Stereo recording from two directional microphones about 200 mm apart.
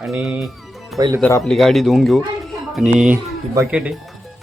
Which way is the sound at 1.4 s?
Centre (ahead or behind).